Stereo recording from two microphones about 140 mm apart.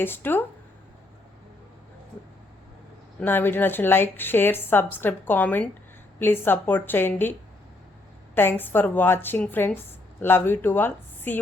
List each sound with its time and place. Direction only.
0.0 s a woman's voice: 15° left (ahead or behind)
3.2 s a woman's voice: 15° left (ahead or behind)
8.4 s a woman's voice: 15° left (ahead or behind)